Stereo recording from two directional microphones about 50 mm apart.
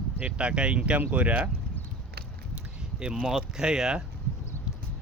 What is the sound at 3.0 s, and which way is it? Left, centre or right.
Speech, centre.